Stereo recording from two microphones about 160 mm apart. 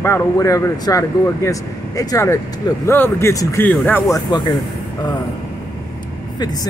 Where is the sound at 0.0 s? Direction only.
15° left (ahead or behind).